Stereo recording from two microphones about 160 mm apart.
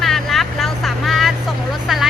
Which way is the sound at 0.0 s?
Centre (ahead or behind).